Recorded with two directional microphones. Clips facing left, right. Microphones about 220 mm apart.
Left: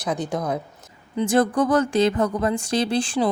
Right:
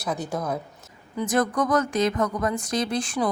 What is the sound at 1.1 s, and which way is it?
Speech, 30° left (ahead or behind).